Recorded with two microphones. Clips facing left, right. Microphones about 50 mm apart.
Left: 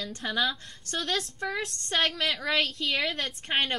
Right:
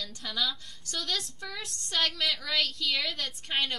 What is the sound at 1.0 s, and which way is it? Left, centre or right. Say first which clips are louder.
Speech: left 5 dB; left.